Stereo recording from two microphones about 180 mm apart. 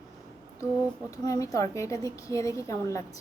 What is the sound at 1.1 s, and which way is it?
A woman's voice, 20° left (ahead or behind).